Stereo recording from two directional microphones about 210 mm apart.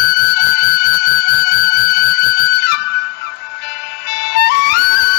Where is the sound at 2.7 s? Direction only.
55° left (ahead or behind).